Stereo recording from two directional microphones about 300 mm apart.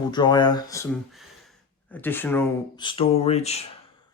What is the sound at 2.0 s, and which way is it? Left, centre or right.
Speech, centre.